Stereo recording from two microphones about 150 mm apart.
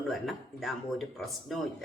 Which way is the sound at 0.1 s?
Centre (ahead or behind).